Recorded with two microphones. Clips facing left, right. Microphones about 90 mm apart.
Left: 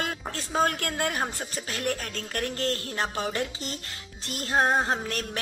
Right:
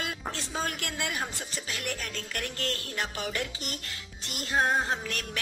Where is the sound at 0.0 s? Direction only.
40° left (ahead or behind).